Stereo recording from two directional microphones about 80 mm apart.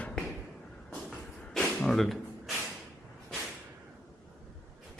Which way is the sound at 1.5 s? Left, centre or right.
Centre.